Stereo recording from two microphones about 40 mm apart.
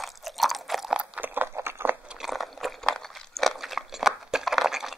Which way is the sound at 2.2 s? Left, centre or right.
Centre.